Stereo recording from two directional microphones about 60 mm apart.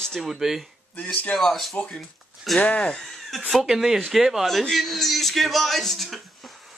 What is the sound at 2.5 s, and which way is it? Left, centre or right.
Speech, centre.